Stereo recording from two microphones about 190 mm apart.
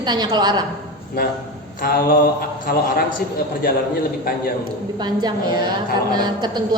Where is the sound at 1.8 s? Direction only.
50° left (ahead or behind).